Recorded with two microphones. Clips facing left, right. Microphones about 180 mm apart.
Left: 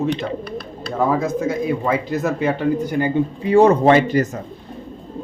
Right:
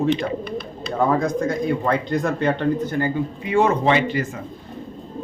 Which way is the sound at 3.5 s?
35° left (ahead or behind).